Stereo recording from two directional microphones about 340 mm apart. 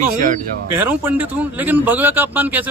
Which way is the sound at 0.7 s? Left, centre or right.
Centre.